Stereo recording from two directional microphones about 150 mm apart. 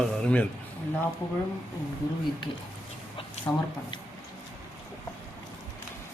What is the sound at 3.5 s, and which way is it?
Speech, 15° left (ahead or behind).